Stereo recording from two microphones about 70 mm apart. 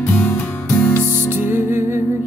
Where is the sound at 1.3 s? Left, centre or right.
Right.